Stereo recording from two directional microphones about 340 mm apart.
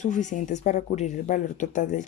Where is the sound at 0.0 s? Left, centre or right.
Left.